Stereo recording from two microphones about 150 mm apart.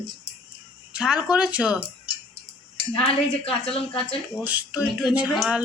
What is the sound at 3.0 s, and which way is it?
A woman's voice, 40° left (ahead or behind).